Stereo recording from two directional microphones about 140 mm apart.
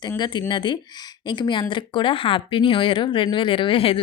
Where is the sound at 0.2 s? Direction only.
30° left (ahead or behind).